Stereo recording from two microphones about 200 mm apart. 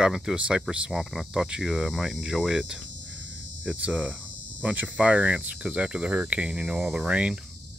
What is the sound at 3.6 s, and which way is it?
Speech, 5° right (ahead or behind).